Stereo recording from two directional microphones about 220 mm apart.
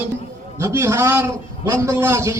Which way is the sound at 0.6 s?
10° right (ahead or behind).